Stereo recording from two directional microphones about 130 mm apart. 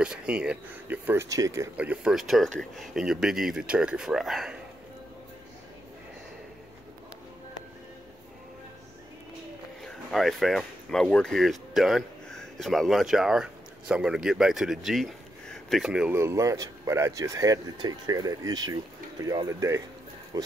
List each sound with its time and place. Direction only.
0.0 s speech: 5° right (ahead or behind); by 1.7 s 25° right (ahead or behind)
1.8 s speech: 10° right (ahead or behind)
10.1 s speech: centre (ahead or behind)
16.2 s speech: 25° right (ahead or behind)